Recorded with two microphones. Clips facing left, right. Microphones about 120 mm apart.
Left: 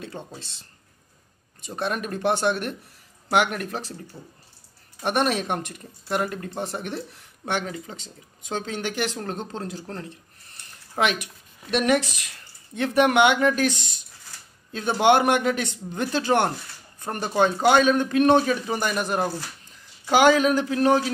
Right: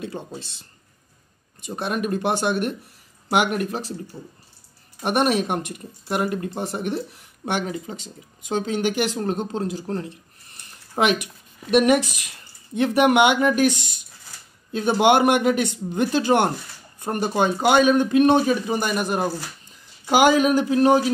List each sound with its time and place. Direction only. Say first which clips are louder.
1.6 s speech: right 2 dB; 10° right (ahead or behind)
5.0 s speech: right 3 dB; 10° right (ahead or behind)